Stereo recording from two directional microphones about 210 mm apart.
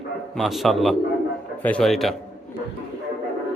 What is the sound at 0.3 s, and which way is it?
Speech, centre (ahead or behind).